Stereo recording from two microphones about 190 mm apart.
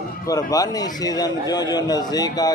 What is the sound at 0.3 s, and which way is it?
A man's voice, 20° left (ahead or behind).